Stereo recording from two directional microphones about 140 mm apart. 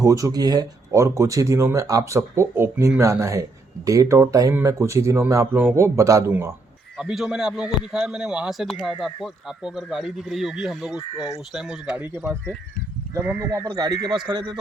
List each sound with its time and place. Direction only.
0.0 s speech: 25° right (ahead or behind)
6.9 s speech: centre (ahead or behind); by 14.6 s 30° right (ahead or behind)